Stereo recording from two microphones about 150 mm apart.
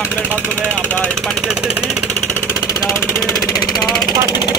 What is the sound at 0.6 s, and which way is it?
Speech, 10° left (ahead or behind).